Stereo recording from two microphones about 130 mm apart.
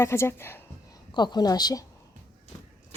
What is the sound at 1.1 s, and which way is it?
Speech, 35° left (ahead or behind).